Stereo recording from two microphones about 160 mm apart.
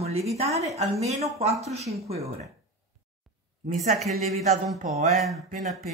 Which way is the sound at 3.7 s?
50° right (ahead or behind).